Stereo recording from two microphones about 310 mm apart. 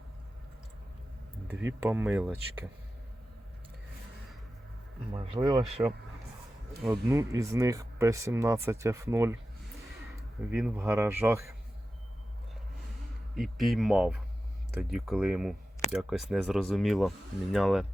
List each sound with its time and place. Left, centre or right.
1.5 s speech: centre
5.1 s speech: centre
6.8 s speech: centre
10.5 s speech: centre
13.3 s speech: centre